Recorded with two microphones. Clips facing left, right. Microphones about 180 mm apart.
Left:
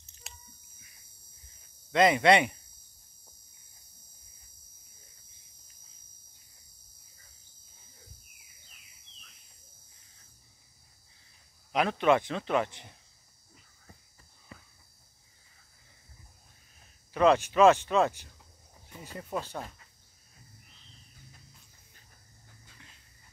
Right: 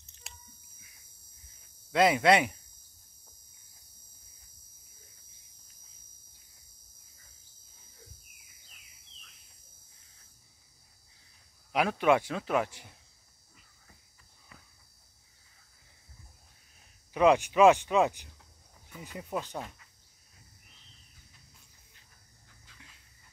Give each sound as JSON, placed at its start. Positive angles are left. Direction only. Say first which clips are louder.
{"t": 0.0, "sound": "a sound", "louder": "left 1 dB", "side_deg": 0}
{"t": 1.9, "sound": "speech", "louder": "left 1 dB", "side_deg": -5}
{"t": 11.7, "sound": "speech", "louder": "even", "side_deg": -5}
{"t": 14.5, "sound": "a sound", "louder": "left 6 dB", "side_deg": 30}
{"t": 17.1, "sound": "speech", "louder": "even", "side_deg": -15}
{"t": 18.9, "sound": "speech", "louder": "even", "side_deg": 35}